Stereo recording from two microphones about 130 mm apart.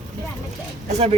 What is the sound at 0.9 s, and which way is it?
Speech, 60° right (ahead or behind).